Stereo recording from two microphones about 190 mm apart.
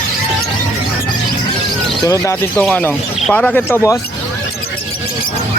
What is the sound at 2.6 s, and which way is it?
Speech, 5° left (ahead or behind).